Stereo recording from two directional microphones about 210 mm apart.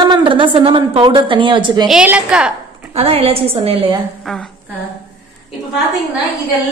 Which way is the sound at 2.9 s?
30° right (ahead or behind).